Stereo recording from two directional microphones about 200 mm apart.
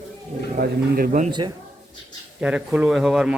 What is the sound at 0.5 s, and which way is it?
Speech, 45° right (ahead or behind).